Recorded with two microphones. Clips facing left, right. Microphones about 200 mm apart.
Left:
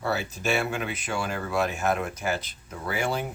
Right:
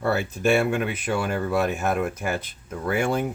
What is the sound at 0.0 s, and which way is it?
Speech, 55° right (ahead or behind).